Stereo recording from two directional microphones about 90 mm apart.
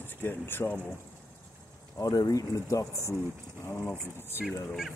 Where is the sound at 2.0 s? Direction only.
40° left (ahead or behind); by 3.9 s 25° left (ahead or behind).